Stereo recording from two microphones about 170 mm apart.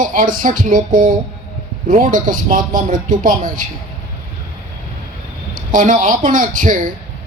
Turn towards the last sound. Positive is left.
turn(degrees=-50)  # may be behind; listen again after turning